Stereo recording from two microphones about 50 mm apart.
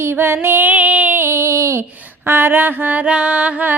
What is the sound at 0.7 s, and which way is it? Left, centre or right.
Child singing, right.